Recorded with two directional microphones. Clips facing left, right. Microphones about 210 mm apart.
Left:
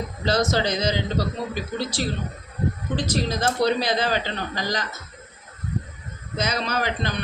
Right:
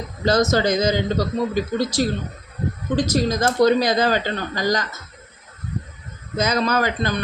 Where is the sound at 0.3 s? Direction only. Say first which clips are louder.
Right 5 dB; 45° right (ahead or behind).